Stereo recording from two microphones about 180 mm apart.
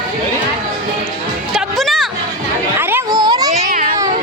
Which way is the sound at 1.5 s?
Centre (ahead or behind).